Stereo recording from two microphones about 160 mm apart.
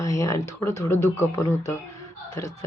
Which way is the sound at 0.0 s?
20° left (ahead or behind).